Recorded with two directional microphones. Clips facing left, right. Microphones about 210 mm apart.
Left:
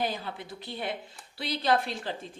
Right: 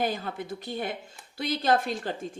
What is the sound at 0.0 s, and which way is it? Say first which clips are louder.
Speech: right 3 dB; 50° right (ahead or behind).